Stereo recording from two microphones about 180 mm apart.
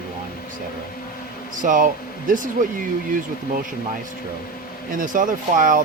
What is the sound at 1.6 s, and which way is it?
Speech, 45° right (ahead or behind).